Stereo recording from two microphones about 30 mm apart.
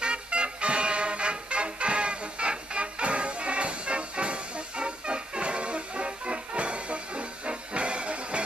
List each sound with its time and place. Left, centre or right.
0.0 s music: right